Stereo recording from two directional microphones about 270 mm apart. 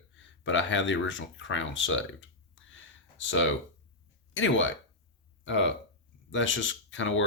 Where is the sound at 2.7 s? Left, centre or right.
Left.